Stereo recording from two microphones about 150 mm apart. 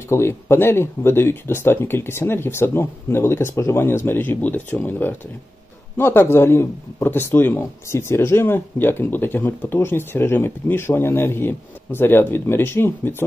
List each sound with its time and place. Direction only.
0.1 s speech: 15° left (ahead or behind)